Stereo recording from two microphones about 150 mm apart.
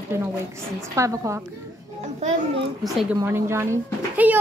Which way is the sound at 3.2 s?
15° right (ahead or behind).